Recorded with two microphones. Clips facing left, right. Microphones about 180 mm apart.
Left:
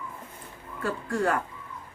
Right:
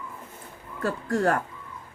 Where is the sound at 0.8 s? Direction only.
40° right (ahead or behind).